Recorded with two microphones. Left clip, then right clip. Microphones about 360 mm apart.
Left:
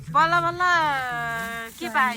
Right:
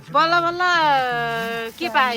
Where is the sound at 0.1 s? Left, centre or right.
Centre.